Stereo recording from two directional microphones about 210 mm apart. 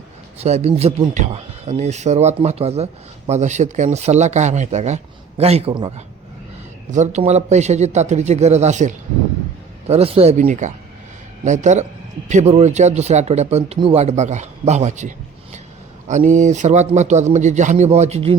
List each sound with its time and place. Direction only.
0.4 s a man's voice: 30° right (ahead or behind)
6.9 s speech: 35° right (ahead or behind)